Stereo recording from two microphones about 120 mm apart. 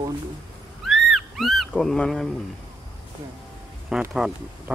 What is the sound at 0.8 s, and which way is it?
Speech, centre (ahead or behind).